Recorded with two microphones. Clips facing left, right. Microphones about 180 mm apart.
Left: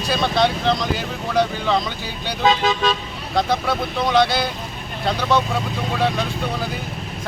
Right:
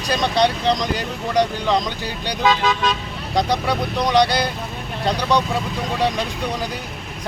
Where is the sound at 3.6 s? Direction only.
5° left (ahead or behind).